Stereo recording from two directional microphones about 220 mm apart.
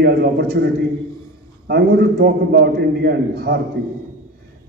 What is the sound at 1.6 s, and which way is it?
A man's voice, 45° right (ahead or behind).